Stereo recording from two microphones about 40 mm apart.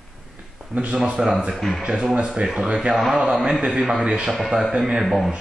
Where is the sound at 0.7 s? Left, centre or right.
Right.